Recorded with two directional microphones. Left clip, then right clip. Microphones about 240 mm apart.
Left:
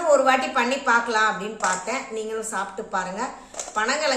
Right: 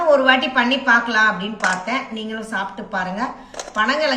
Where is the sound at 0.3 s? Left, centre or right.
Left.